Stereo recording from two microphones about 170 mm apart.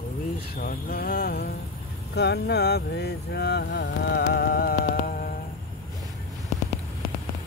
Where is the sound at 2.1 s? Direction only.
80° left; by 5.3 s 55° left (ahead or behind).